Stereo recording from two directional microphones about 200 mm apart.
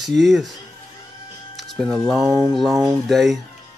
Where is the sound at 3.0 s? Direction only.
Centre (ahead or behind).